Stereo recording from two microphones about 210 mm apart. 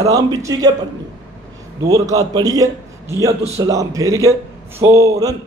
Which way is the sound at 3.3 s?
30° right (ahead or behind).